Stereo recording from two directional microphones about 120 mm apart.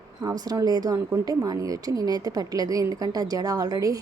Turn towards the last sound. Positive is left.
turn(degrees=-30)  # may be behind; listen again after turning